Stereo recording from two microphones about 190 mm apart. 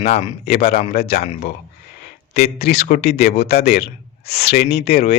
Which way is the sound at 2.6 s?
55° left (ahead or behind).